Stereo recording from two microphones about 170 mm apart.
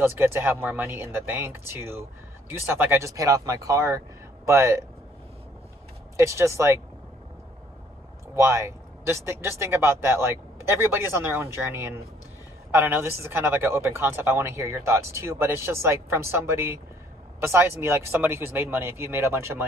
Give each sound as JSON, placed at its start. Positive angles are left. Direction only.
{"t": 0.0, "sound": "speech", "side_deg": -15}
{"t": 6.1, "sound": "speech", "side_deg": -15}
{"t": 8.4, "sound": "speech", "side_deg": -15}